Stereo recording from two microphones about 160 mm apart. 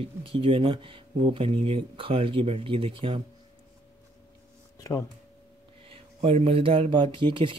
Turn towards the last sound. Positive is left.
turn(degrees=-30)  # may be behind; listen again after turning